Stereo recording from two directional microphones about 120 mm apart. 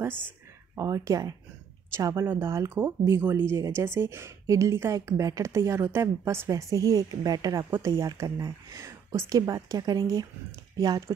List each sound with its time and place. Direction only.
0.7 s speech: 25° right (ahead or behind)